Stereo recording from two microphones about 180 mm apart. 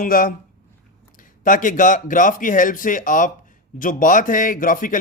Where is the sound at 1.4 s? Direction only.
45° left (ahead or behind).